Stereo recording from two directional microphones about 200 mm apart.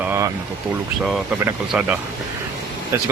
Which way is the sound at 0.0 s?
10° right (ahead or behind).